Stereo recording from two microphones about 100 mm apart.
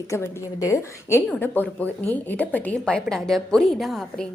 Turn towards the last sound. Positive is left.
turn(degrees=0)  # may be behind; listen again after turning